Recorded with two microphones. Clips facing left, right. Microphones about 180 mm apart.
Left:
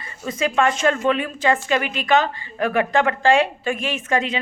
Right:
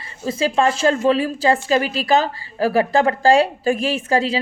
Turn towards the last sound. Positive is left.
turn(degrees=-30)  # may be behind; listen again after turning